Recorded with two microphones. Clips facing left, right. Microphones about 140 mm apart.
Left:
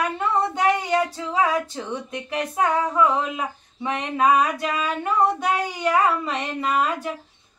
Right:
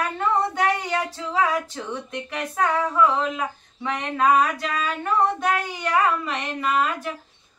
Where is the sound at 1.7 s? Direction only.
15° left (ahead or behind).